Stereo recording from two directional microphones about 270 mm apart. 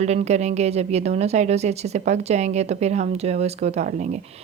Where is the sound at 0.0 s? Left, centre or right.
Right.